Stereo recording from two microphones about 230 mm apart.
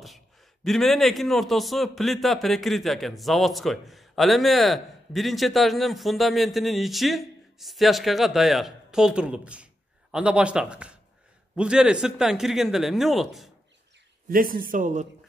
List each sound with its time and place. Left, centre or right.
0.7 s a man's voice: centre
14.3 s speech: right